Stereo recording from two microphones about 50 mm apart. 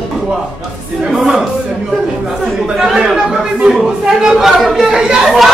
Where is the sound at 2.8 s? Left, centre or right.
Centre.